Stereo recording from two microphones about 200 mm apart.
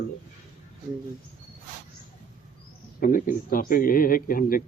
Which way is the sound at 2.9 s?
45° left (ahead or behind).